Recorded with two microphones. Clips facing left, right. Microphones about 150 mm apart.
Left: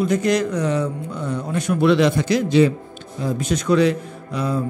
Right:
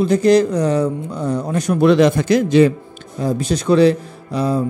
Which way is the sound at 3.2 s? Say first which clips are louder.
Right 3 dB; 35° right (ahead or behind).